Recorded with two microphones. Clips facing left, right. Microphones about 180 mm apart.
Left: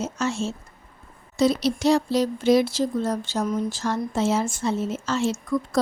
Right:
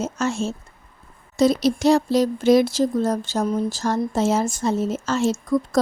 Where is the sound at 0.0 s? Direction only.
45° right (ahead or behind).